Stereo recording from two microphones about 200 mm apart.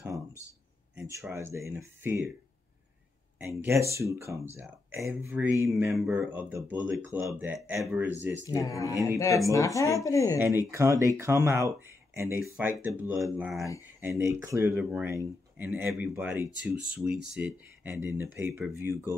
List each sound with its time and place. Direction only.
0.9 s speech: 15° right (ahead or behind)
3.3 s speech: 10° right (ahead or behind)
8.5 s speech: 15° left (ahead or behind)
10.7 s speech: 15° right (ahead or behind)